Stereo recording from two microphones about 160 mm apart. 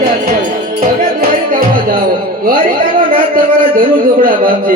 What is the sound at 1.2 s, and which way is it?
Music, 65° right (ahead or behind).